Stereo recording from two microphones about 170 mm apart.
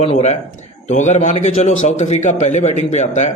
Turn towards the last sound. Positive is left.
turn(degrees=40)  # may be behind; listen again after turning